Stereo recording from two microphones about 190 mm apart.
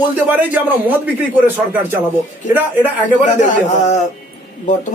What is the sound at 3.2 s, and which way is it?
Speech, 40° left (ahead or behind).